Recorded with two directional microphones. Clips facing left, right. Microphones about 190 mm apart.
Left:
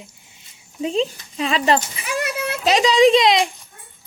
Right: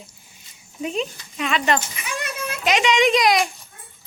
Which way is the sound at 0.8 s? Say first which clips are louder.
Left 5 dB; 30° left (ahead or behind).